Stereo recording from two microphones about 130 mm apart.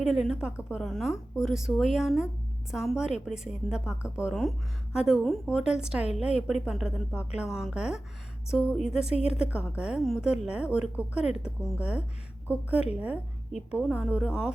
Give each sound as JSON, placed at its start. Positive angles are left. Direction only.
{"t": 0.0, "sound": "a woman's voice", "side_deg": -5}
{"t": 9.1, "sound": "a woman's voice", "side_deg": 55}
{"t": 9.5, "sound": "a woman's voice", "side_deg": -10}